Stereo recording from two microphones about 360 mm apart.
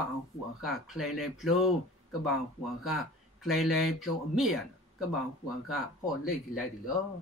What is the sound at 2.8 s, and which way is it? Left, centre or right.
Speech, centre.